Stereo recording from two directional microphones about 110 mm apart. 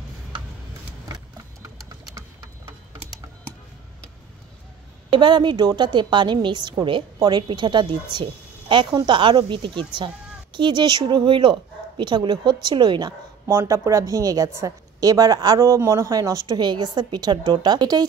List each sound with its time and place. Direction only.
1.0 s a sound: 35° right (ahead or behind)
5.1 s a woman's voice: 45° right (ahead or behind)
13.5 s a woman's voice: 25° right (ahead or behind)